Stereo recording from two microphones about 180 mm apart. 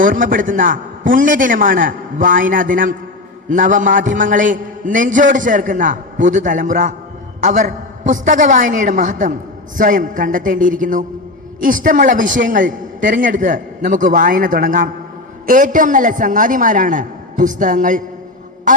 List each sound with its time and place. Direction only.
0.0 s a man's voice: 50° right (ahead or behind)